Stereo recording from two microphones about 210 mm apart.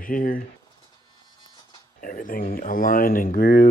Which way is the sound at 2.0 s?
40° left (ahead or behind).